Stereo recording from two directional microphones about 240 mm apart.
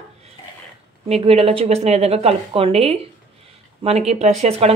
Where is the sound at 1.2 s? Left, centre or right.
Right.